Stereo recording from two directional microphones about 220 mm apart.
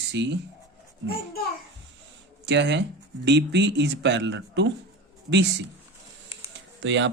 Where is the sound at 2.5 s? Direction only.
55° right (ahead or behind).